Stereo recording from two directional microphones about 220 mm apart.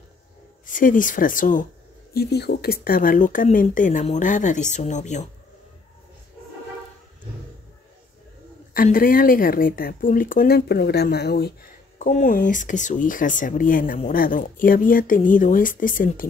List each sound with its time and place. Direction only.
0.7 s speech: 35° left (ahead or behind)
2.1 s speech: 50° left (ahead or behind); by 5.3 s 30° left (ahead or behind)
8.7 s speech: 40° left (ahead or behind)